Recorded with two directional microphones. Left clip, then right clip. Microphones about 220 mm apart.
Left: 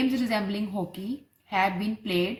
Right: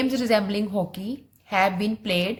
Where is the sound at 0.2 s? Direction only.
40° right (ahead or behind).